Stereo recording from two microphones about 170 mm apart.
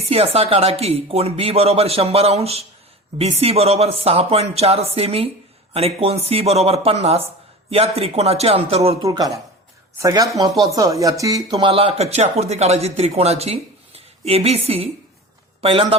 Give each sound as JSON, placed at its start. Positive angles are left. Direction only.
{"t": 0.0, "sound": "speech", "side_deg": -35}
{"t": 9.0, "sound": "speech", "side_deg": -20}